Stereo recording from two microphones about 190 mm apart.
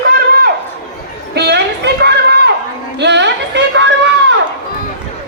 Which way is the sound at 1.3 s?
60° right (ahead or behind).